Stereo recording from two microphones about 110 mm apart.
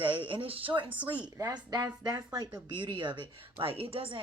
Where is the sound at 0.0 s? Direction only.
50° right (ahead or behind).